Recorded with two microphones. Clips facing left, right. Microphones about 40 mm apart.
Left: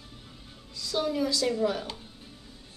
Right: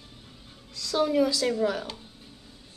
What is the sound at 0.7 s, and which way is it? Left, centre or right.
Music, right.